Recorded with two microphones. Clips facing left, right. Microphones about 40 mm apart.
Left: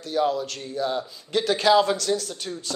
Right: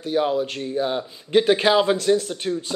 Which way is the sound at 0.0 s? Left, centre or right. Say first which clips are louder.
Right 2 dB; right.